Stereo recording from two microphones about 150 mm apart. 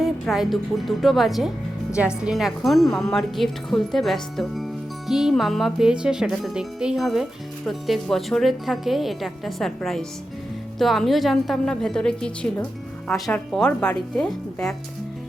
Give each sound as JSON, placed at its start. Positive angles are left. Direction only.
{"t": 0.0, "sound": "speech", "side_deg": 0}